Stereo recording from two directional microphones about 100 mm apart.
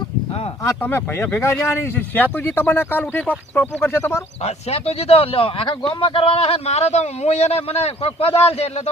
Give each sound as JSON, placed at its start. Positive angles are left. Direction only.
{"t": 0.6, "sound": "speech", "side_deg": 25}
{"t": 4.4, "sound": "speech", "side_deg": 90}